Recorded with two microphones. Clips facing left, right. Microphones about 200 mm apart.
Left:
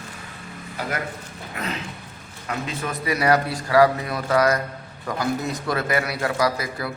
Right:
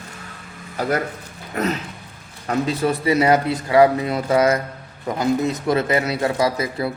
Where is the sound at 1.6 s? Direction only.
40° right (ahead or behind).